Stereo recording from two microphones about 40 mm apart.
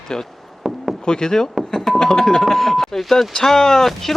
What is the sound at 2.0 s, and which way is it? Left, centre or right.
Speech, centre.